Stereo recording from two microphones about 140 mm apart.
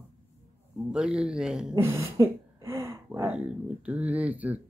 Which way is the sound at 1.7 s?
20° right (ahead or behind).